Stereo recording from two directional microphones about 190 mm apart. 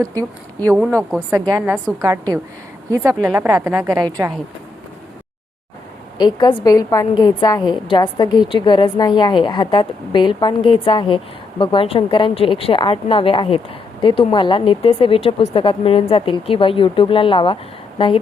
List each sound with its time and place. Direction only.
0.0 s a woman's voice: 20° right (ahead or behind)
6.1 s a woman's voice: 20° left (ahead or behind)